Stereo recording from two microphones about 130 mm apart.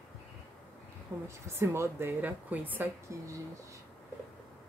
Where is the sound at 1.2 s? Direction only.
20° right (ahead or behind).